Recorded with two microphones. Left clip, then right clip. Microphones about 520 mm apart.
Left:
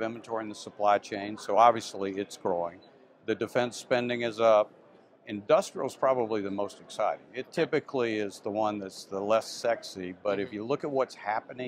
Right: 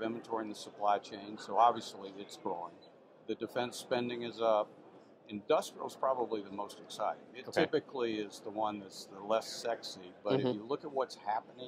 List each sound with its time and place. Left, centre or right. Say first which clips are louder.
0.0 s speech: left 5 dB; left